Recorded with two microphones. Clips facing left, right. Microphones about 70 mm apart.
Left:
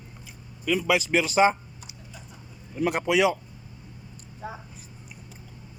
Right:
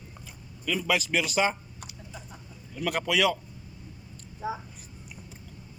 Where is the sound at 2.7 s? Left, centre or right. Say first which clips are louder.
Left 4 dB; left.